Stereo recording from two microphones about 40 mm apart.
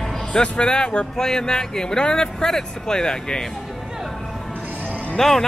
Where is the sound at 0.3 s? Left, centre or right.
Left.